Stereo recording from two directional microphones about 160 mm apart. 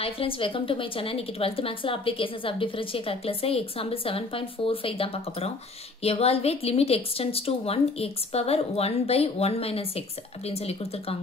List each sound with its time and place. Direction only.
0.0 s a woman's voice: 35° left (ahead or behind)